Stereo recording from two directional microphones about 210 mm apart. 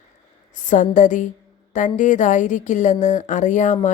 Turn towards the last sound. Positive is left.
turn(degrees=35)  # may be behind; listen again after turning